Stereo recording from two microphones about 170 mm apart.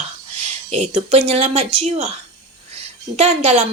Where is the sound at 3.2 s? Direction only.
40° right (ahead or behind).